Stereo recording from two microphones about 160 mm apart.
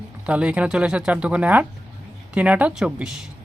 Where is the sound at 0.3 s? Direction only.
10° right (ahead or behind).